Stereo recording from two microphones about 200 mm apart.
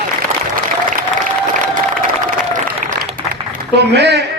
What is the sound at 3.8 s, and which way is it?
Speech, 55° right (ahead or behind).